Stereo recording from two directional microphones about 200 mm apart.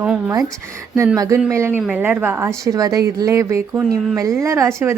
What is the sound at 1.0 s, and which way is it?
Speech, 15° right (ahead or behind).